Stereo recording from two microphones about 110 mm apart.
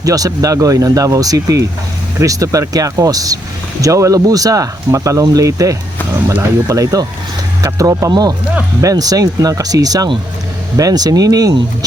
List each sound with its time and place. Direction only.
0.0 s speech: 30° right (ahead or behind)